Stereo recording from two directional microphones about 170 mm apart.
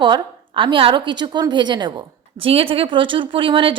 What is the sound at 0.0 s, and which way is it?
A woman's voice, 30° right (ahead or behind).